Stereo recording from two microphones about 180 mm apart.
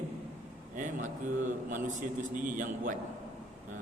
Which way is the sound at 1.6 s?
45° right (ahead or behind).